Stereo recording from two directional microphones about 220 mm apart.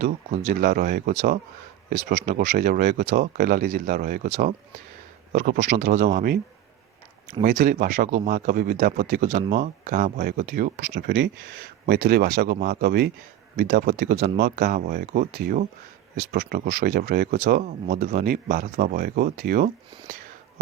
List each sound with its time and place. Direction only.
0.0 s speech: 40° right (ahead or behind)
7.4 s speech: 40° right (ahead or behind)